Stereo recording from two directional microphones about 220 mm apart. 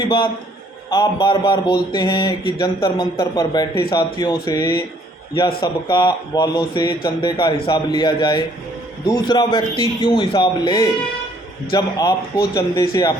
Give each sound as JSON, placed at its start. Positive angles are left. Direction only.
{"t": 0.9, "sound": "a man's voice", "side_deg": 20}